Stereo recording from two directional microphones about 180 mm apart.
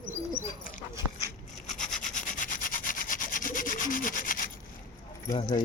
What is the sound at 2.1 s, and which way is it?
Rub, 50° left (ahead or behind).